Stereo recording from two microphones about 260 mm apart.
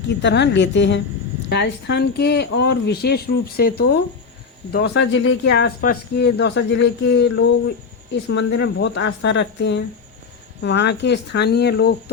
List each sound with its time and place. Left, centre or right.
0.2 s a woman's voice: left